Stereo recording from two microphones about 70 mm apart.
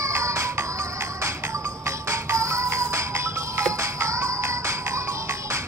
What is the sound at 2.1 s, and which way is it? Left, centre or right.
Music, right.